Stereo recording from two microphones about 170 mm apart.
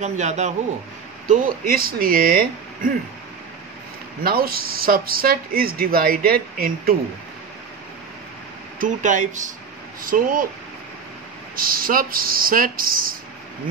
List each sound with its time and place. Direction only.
0.0 s speech: 45° right (ahead or behind); by 2.9 s 60° right (ahead or behind)
4.2 s speech: 60° right (ahead or behind)
8.7 s speech: 50° right (ahead or behind)
11.5 s speech: 60° right (ahead or behind)